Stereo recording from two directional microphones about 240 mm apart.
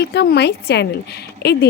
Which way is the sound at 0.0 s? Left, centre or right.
Left.